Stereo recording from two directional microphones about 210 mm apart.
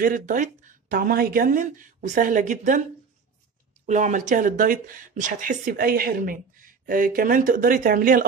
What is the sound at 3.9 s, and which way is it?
Speech, 35° right (ahead or behind).